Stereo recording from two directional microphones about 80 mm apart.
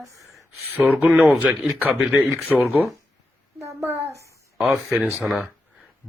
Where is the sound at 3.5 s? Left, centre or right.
Right.